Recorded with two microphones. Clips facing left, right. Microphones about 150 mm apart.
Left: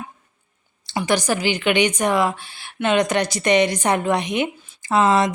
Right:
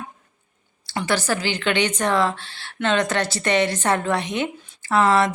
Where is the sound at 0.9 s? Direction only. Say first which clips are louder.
Left 2 dB; 15° left (ahead or behind).